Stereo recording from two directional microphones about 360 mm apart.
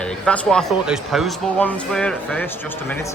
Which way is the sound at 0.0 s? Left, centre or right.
Centre.